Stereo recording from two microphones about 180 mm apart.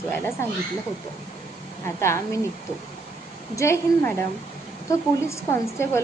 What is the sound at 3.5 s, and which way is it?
A woman's voice, 15° left (ahead or behind).